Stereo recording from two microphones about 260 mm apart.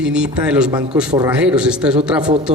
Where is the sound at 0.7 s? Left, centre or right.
Centre.